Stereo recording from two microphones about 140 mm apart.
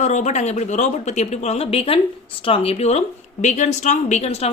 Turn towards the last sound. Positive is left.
turn(degrees=50)  # may be behind; listen again after turning